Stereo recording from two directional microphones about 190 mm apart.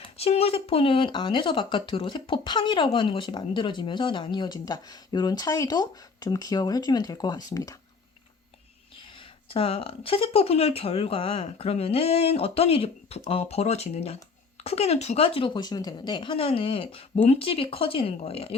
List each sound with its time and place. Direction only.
0.0 s speech: 30° left (ahead or behind)
9.5 s speech: 30° left (ahead or behind)